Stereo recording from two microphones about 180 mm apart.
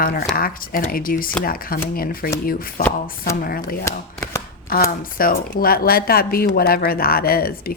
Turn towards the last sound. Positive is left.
turn(degrees=55)  # may be behind; listen again after turning